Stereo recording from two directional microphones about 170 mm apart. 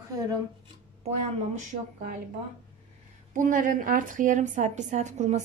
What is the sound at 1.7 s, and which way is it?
Speech, 50° right (ahead or behind).